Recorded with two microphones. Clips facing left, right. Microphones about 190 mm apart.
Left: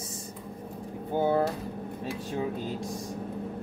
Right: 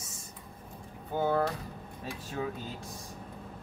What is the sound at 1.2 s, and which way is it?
A man's voice, 20° left (ahead or behind).